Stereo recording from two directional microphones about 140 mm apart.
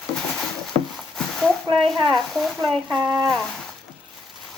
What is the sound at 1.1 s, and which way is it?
Speech, 5° left (ahead or behind).